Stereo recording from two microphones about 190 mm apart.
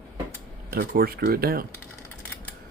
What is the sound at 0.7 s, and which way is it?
Speech, 50° right (ahead or behind).